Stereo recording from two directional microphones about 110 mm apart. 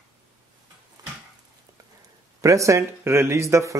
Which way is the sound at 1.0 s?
40° right (ahead or behind).